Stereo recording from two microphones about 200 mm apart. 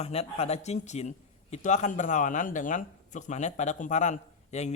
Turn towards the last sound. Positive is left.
turn(degrees=35)  # may be behind; listen again after turning